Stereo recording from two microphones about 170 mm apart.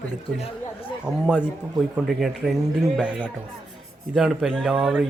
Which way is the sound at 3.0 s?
5° right (ahead or behind).